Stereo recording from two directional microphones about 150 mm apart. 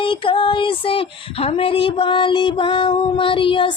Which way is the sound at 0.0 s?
35° left (ahead or behind).